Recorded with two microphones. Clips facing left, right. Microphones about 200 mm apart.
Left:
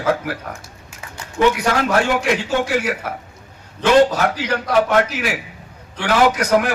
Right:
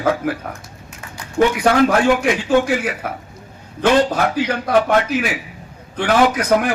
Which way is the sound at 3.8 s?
55° right (ahead or behind).